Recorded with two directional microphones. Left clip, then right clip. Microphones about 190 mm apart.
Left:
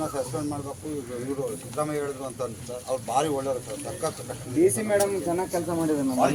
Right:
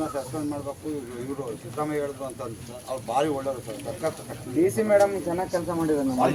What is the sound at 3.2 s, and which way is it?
Speech, 50° left (ahead or behind).